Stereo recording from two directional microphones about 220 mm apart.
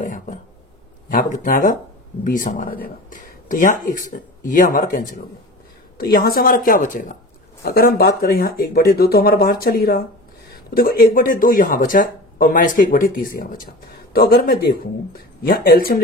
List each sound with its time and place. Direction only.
0.0 s a sound: 35° left (ahead or behind)
1.1 s speech: 35° left (ahead or behind)
15.4 s speech: 40° left (ahead or behind)